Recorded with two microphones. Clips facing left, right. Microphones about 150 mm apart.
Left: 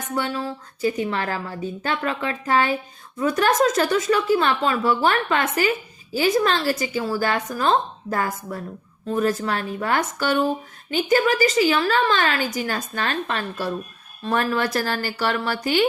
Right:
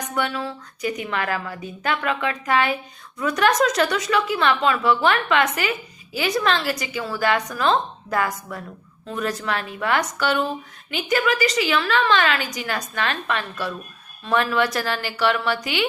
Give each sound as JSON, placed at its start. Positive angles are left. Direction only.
{"t": 0.1, "sound": "a woman's voice", "side_deg": 35}
{"t": 4.1, "sound": "a woman's voice", "side_deg": 40}